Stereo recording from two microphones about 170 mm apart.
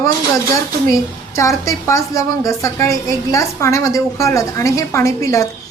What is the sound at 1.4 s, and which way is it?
A woman's voice, 20° left (ahead or behind).